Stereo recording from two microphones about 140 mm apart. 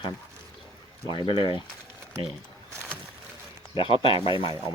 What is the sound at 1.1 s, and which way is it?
Speech, 35° left (ahead or behind).